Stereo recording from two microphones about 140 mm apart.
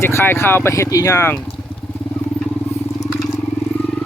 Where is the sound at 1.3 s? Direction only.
5° left (ahead or behind).